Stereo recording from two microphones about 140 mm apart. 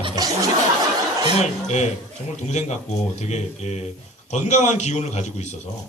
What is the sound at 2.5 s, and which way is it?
A man's voice, 55° left (ahead or behind).